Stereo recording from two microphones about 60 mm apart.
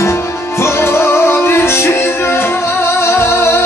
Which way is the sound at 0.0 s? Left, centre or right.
Left.